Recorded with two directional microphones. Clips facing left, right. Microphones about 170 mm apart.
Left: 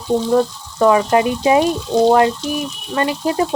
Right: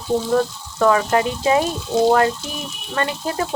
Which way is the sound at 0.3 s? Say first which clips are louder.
Left 3 dB; 20° left (ahead or behind).